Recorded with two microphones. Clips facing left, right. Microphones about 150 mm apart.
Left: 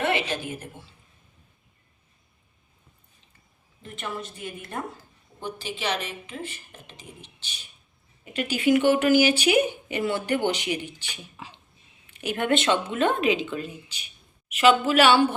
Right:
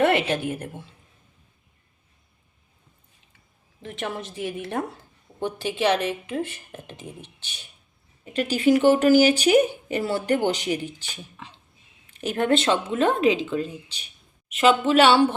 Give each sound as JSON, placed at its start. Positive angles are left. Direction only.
{"t": 0.0, "sound": "a woman's voice", "side_deg": -55}
{"t": 3.8, "sound": "a woman's voice", "side_deg": -85}
{"t": 5.4, "sound": "speech", "side_deg": -60}
{"t": 8.2, "sound": "speech", "side_deg": -35}
{"t": 11.4, "sound": "speech", "side_deg": 5}
{"t": 12.1, "sound": "speech", "side_deg": -40}